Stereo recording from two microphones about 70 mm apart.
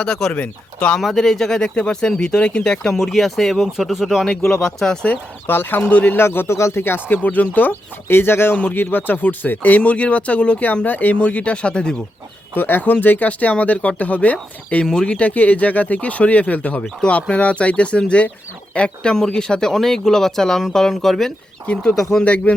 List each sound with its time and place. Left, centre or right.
0.0 s speech: centre
0.3 s speech: centre
0.9 s speech: centre
2.8 s speech: centre
4.3 s speech: centre
5.0 s speech: left
6.1 s speech: left; by 11.9 s centre
12.5 s speech: left
14.8 s speech: centre
22.2 s speech: centre